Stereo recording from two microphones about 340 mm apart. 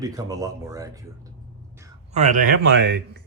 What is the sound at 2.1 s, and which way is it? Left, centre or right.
A man's voice, right.